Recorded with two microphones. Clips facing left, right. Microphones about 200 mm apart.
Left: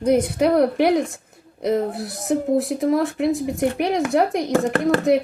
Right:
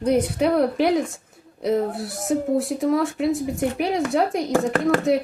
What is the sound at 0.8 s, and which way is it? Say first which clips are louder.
Speech: left 2 dB; 60° left (ahead or behind).